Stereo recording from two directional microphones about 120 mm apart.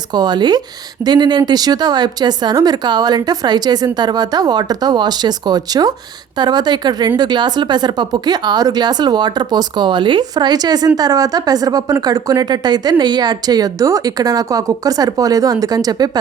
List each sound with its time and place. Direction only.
0.1 s speech: 35° right (ahead or behind)